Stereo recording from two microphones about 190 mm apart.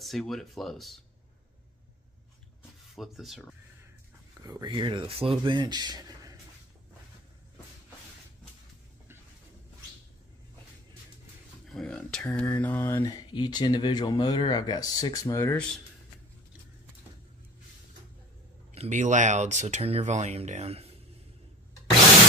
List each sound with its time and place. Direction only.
0.0 s speech: centre (ahead or behind)
3.0 s speech: centre (ahead or behind)
4.5 s speech: 20° right (ahead or behind)
11.7 s speech: 5° left (ahead or behind)
18.7 s speech: 40° right (ahead or behind)